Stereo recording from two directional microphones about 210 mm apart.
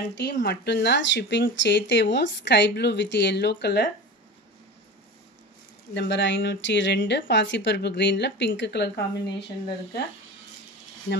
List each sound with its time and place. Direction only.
0.1 s speech: 55° left (ahead or behind)
5.9 s speech: 55° left (ahead or behind)